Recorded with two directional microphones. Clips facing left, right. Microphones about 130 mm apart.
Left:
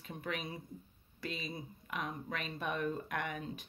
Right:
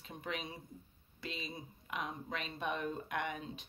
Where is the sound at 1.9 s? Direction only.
25° right (ahead or behind).